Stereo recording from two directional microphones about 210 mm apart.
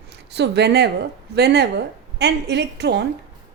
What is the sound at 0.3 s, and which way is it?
A woman's voice, 55° right (ahead or behind).